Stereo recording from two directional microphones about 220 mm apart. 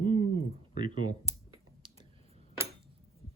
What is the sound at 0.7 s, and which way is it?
Speech, 20° right (ahead or behind).